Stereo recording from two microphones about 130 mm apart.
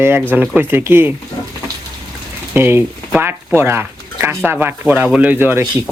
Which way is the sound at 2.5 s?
15° right (ahead or behind).